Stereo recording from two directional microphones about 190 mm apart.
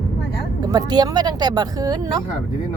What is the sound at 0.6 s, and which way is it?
Speech, 20° right (ahead or behind).